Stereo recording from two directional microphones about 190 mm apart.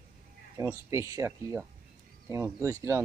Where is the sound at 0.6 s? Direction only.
15° right (ahead or behind).